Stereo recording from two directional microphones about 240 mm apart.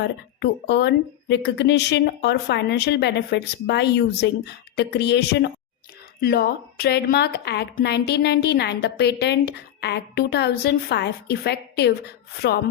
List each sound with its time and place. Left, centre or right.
0.0 s a woman's voice: left